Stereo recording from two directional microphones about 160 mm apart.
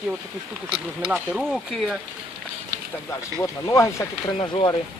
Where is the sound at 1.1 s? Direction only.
5° right (ahead or behind).